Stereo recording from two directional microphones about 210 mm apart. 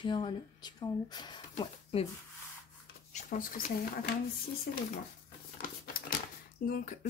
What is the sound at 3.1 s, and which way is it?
Speech, 35° left (ahead or behind).